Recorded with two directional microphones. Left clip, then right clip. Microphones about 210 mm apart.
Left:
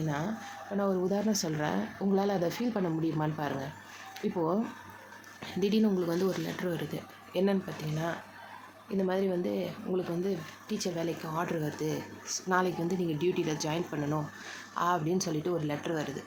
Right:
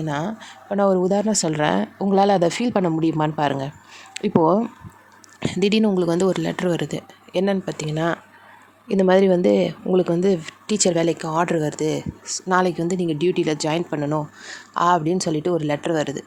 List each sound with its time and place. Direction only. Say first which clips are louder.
0.8 s speech: right 12 dB; 40° right (ahead or behind)